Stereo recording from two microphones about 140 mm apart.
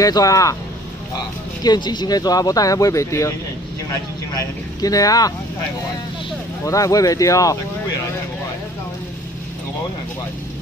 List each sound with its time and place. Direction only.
0.0 s speech: 25° left (ahead or behind)
1.6 s speech: 30° left (ahead or behind)
4.8 s speech: 25° left (ahead or behind)
6.6 s speech: 25° left (ahead or behind)